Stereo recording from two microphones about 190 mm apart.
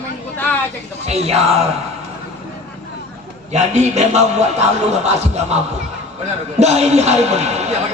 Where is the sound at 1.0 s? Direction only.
35° right (ahead or behind).